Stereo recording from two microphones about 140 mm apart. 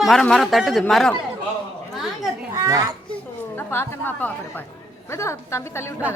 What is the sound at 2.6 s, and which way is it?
Speech, 25° right (ahead or behind).